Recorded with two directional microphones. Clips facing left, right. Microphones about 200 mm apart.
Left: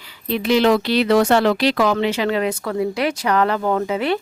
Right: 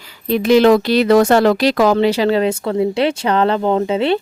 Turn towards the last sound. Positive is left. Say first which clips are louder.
# right 4 dB
turn(degrees=-25)  # may be behind; listen again after turning